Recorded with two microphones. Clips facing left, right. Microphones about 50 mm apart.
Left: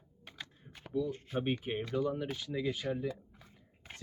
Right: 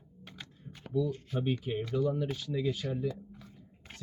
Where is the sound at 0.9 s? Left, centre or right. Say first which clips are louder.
Right 2 dB; left.